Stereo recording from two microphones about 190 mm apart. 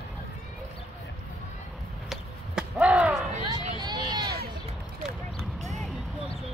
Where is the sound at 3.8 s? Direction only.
20° right (ahead or behind).